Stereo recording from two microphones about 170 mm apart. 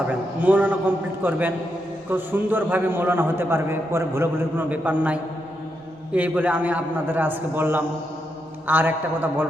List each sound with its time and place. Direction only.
0.3 s a man's voice: 10° right (ahead or behind)